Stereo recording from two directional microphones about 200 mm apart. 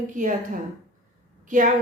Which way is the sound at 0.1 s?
40° right (ahead or behind).